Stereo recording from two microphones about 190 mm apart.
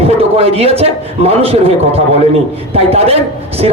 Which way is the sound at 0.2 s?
30° right (ahead or behind).